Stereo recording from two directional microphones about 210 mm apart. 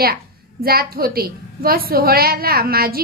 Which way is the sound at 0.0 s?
45° right (ahead or behind).